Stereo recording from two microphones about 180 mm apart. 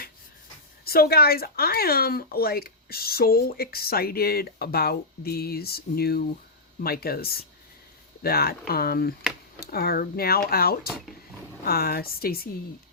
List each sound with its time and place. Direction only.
0.9 s speech: 60° left (ahead or behind)